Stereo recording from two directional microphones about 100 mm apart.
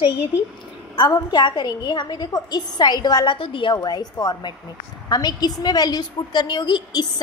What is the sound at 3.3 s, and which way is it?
Speech, 60° left (ahead or behind).